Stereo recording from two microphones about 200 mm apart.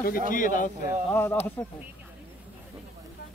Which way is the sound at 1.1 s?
10° left (ahead or behind).